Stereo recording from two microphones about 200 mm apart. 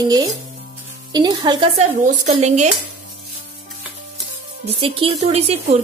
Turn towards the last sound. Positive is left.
turn(degrees=-30)  # may be behind; listen again after turning